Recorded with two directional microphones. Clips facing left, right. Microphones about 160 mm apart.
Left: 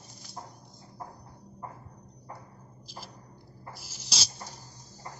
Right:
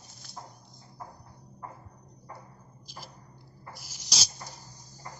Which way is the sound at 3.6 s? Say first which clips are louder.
Left 1 dB; 30° left (ahead or behind).